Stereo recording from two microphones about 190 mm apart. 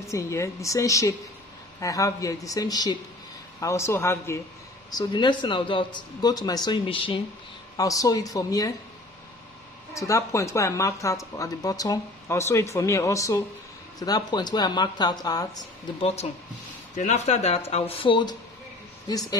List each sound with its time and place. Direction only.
0.1 s speech: 15° left (ahead or behind)
4.9 s speech: 25° left (ahead or behind)
9.9 s speech: 15° left (ahead or behind)
16.9 s speech: 40° left (ahead or behind); by 19.2 s 20° left (ahead or behind)